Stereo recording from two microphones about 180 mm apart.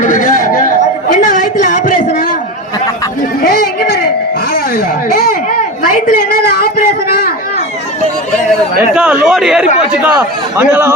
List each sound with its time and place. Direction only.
0.0 s chatter: 45° left (ahead or behind)
3.4 s chatter: 55° left (ahead or behind)
5.1 s a sound: 55° left (ahead or behind)
8.9 s a man's voice: 5° right (ahead or behind)